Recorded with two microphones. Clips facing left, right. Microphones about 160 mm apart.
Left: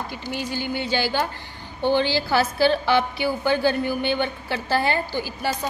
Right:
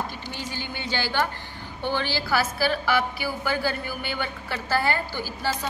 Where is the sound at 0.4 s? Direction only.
10° left (ahead or behind).